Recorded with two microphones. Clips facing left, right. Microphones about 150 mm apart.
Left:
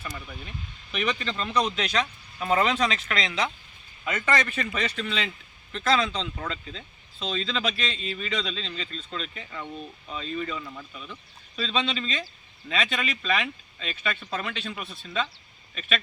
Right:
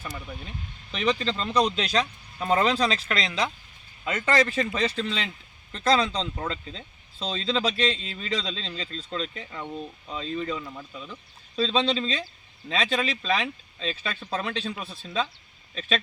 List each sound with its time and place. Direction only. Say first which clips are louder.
0.9 s speech: right 3 dB; 30° right (ahead or behind)